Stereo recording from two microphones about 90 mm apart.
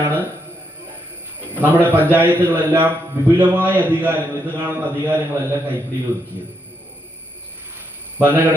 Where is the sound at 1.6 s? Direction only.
20° right (ahead or behind).